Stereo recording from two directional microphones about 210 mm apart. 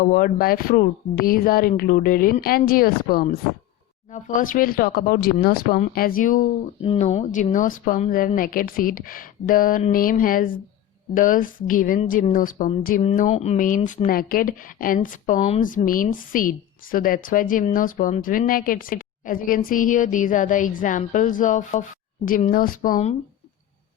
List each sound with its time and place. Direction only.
0.0 s speech: 40° left (ahead or behind)
6.8 s speech: 30° left (ahead or behind)